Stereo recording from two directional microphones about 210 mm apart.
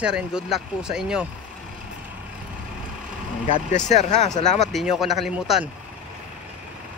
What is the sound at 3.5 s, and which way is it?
Speech, 35° left (ahead or behind).